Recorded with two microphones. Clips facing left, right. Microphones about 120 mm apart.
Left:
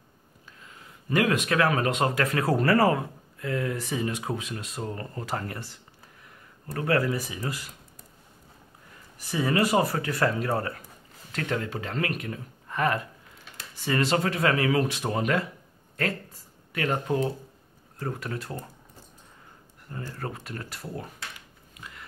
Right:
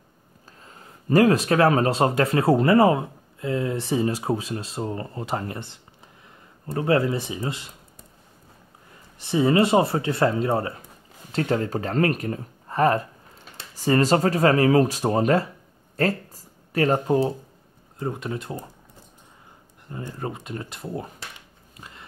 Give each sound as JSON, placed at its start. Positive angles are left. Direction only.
{"t": 0.7, "sound": "speech", "side_deg": -35}
{"t": 9.2, "sound": "speech", "side_deg": -25}
{"t": 17.9, "sound": "speech", "side_deg": -20}
{"t": 19.9, "sound": "speech", "side_deg": -20}
{"t": 21.7, "sound": "a sound", "side_deg": -30}